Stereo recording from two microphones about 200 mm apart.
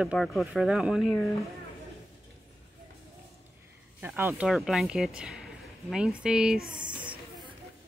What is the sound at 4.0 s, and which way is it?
Speech, 10° right (ahead or behind).